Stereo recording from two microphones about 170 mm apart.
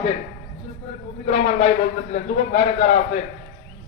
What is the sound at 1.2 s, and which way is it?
A man's voice, 40° left (ahead or behind).